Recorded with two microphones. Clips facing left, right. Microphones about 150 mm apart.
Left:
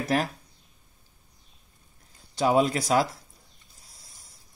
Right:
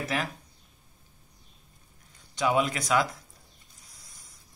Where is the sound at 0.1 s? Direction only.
40° left (ahead or behind).